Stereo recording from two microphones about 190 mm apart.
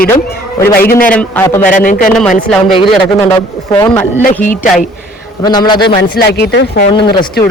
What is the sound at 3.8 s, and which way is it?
Speech, 10° left (ahead or behind).